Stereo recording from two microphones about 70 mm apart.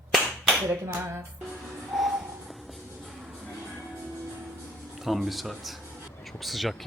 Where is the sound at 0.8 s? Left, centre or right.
Right.